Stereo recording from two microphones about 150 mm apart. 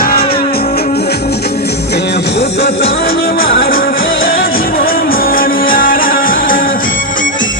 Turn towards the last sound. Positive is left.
turn(degrees=70)  # may be behind; listen again after turning